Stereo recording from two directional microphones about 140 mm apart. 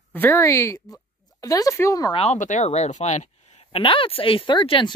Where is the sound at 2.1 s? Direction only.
55° left (ahead or behind).